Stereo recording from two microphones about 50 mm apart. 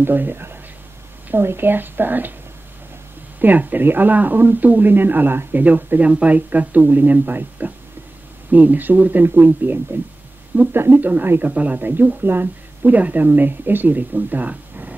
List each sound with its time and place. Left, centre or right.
0.0 s speech: right
3.3 s speech: right
11.4 s speech: right